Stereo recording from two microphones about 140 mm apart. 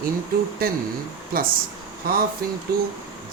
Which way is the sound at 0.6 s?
90° right.